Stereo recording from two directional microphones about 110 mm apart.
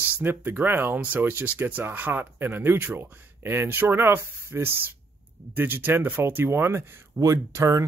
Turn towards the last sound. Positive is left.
turn(degrees=-30)  # may be behind; listen again after turning